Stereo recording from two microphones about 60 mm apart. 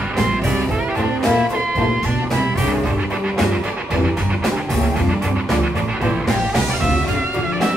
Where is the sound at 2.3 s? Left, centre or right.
Centre.